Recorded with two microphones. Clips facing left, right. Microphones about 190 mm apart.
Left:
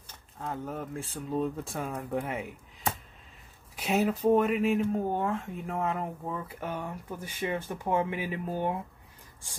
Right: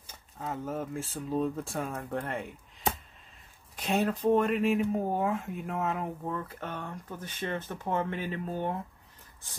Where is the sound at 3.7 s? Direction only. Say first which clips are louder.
Left 1 dB; 5° left (ahead or behind).